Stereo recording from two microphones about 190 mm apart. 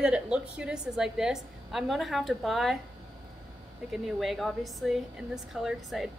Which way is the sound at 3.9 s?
Centre (ahead or behind).